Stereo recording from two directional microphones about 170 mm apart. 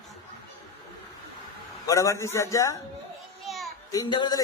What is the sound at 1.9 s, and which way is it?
Speech, 20° left (ahead or behind).